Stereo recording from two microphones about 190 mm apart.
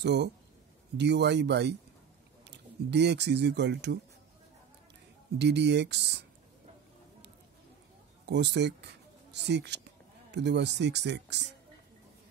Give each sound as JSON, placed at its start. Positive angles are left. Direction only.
{"t": 0.0, "sound": "speech", "side_deg": -65}
{"t": 5.4, "sound": "speech", "side_deg": -65}
{"t": 8.3, "sound": "speech", "side_deg": -65}